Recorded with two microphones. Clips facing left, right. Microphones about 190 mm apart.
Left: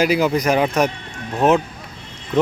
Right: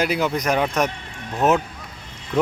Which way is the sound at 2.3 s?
Centre (ahead or behind).